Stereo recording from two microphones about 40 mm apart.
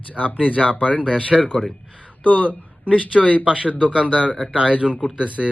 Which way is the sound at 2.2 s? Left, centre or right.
Left.